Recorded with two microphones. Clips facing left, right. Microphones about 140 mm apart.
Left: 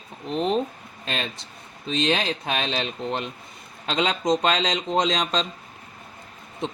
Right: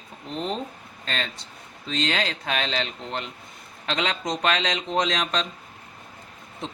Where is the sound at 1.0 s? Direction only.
15° left (ahead or behind).